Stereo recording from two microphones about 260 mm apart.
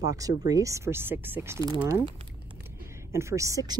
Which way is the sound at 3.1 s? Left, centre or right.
Centre.